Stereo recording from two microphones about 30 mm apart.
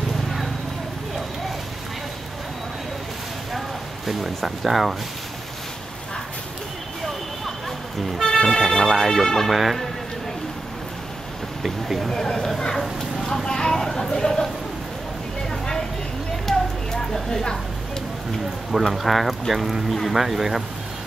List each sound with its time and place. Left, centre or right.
3.5 s a sound: centre
4.4 s speech: centre
8.2 s speech: centre
9.5 s speech: centre
13.2 s a sound: centre
16.4 s music: centre
18.7 s speech: centre
19.0 s speech: centre